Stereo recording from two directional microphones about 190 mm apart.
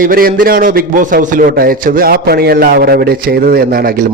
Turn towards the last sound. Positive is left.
turn(degrees=-50)  # may be behind; listen again after turning